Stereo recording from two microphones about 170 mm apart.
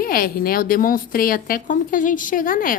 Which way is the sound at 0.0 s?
60° left (ahead or behind).